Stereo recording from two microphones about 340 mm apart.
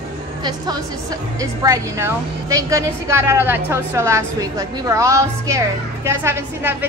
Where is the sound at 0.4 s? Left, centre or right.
Centre.